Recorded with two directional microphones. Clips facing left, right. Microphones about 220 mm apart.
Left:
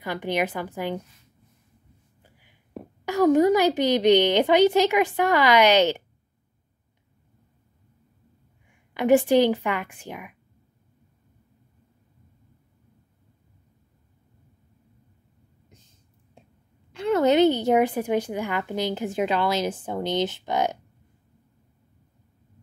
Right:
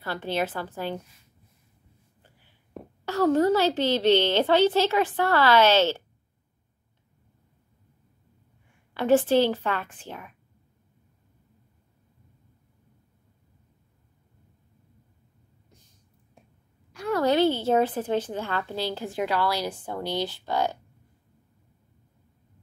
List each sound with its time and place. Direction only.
0.0 s a woman's voice: 15° left (ahead or behind)
2.2 s a woman's voice: 10° left (ahead or behind)
8.6 s a woman's voice: 15° left (ahead or behind)
16.9 s a woman's voice: 25° left (ahead or behind)